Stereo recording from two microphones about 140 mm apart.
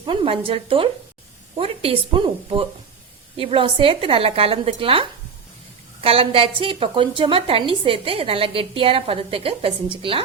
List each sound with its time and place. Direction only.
0.0 s a woman's voice: 40° right (ahead or behind)